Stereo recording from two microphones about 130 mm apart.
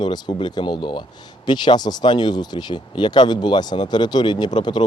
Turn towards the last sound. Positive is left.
turn(degrees=35)  # may be behind; listen again after turning